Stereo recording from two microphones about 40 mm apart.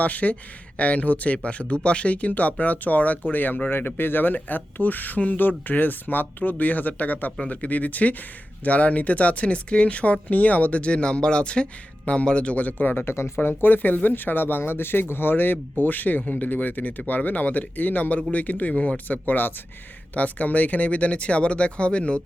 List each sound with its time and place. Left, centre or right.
0.0 s speech: left
3.7 s speech: left
12.6 s speech: left
13.1 s speech: left
13.6 s speech: left
14.1 s speech: left
15.8 s speech: left
20.1 s speech: left